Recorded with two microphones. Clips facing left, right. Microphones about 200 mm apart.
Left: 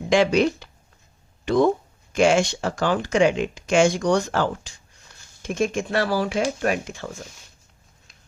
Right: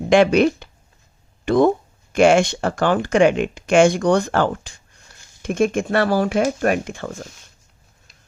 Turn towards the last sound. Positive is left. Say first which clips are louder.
# right 4 dB
turn(degrees=-55)  # may be behind; listen again after turning